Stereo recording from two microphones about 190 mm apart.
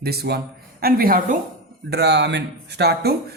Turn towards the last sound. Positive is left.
turn(degrees=-60)  # may be behind; listen again after turning